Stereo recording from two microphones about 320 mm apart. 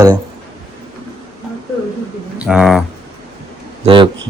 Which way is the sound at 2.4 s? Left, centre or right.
Centre.